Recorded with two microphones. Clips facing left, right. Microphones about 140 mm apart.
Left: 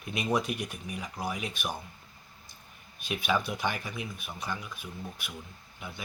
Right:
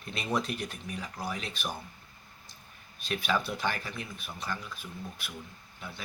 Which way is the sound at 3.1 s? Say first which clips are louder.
Left 1 dB; 10° left (ahead or behind).